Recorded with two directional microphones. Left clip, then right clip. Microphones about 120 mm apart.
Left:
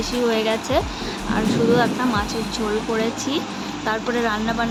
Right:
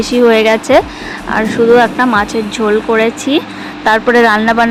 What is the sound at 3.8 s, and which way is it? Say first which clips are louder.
Speech: right 14 dB; 85° right.